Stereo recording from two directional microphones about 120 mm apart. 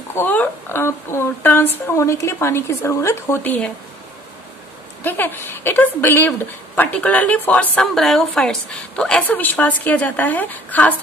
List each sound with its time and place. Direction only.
0.1 s speech: 15° left (ahead or behind)
5.0 s a woman's voice: 15° left (ahead or behind)